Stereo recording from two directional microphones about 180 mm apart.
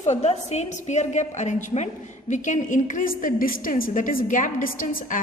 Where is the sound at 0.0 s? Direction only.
40° left (ahead or behind).